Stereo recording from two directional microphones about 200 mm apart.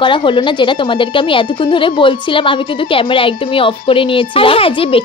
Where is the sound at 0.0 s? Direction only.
25° left (ahead or behind).